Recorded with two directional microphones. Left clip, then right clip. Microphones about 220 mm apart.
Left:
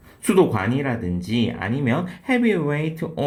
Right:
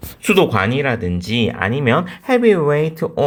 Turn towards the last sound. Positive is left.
turn(degrees=-35)  # may be behind; listen again after turning